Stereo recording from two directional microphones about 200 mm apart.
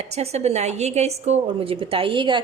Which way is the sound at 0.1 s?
30° right (ahead or behind).